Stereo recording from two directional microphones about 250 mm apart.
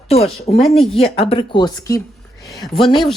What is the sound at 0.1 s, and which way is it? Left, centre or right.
Speech, left.